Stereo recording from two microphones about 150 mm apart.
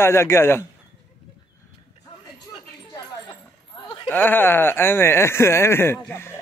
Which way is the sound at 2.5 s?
35° left (ahead or behind).